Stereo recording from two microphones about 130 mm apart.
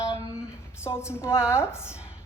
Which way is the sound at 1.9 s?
10° right (ahead or behind).